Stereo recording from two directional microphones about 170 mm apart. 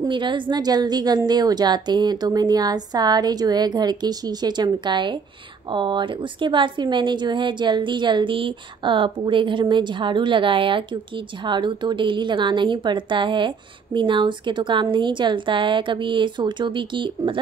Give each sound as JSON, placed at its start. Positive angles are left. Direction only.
{"t": 0.0, "sound": "speech", "side_deg": -25}